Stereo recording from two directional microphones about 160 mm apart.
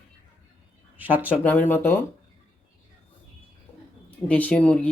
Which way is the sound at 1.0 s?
10° right (ahead or behind).